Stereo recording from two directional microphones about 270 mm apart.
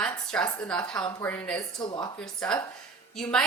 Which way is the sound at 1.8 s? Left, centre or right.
Centre.